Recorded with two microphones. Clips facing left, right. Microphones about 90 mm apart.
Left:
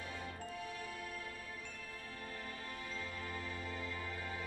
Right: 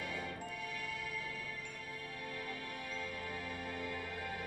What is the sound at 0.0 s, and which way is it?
Music, 60° right (ahead or behind).